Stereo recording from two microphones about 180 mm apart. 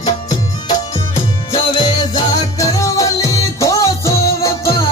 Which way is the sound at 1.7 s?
25° left (ahead or behind).